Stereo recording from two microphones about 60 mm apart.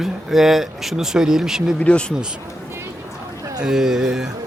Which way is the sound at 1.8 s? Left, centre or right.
Centre.